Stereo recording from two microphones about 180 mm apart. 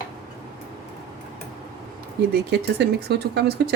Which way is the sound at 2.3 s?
65° right (ahead or behind).